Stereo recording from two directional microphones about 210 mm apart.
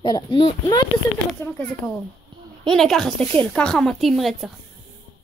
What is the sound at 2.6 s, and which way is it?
Speech, centre (ahead or behind).